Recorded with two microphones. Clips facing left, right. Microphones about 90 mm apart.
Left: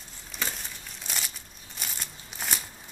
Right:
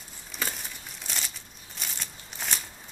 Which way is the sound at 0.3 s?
Centre (ahead or behind).